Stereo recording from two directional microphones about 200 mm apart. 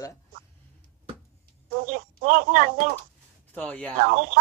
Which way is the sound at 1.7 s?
40° right (ahead or behind).